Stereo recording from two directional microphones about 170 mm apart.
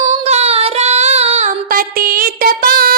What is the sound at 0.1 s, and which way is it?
Singing, 40° right (ahead or behind).